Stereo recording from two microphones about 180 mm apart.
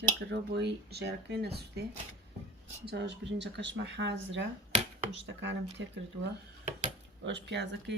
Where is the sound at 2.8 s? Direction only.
70° right (ahead or behind).